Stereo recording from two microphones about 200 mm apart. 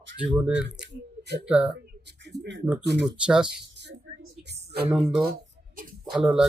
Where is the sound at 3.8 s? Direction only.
60° right (ahead or behind).